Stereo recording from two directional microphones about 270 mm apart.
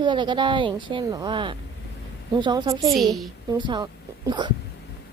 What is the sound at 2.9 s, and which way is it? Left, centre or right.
Speech, centre.